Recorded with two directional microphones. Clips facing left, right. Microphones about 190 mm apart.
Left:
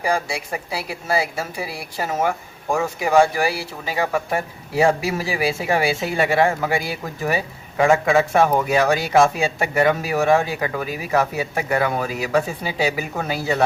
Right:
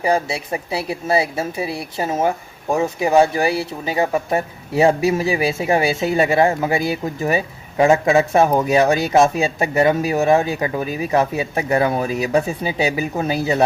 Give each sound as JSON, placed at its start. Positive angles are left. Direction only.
{"t": 0.0, "sound": "a woman's voice", "side_deg": -25}